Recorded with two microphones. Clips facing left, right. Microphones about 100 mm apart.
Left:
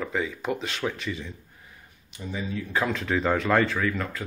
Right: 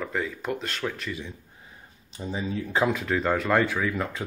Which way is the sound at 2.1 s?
30° right (ahead or behind).